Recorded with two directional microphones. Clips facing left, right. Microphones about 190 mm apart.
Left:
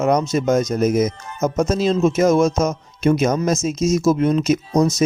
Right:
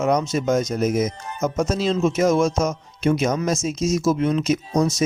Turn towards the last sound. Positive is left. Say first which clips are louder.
# left 3 dB
turn(degrees=40)  # may be behind; listen again after turning